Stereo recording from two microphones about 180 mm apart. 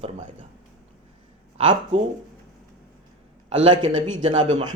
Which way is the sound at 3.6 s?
25° right (ahead or behind).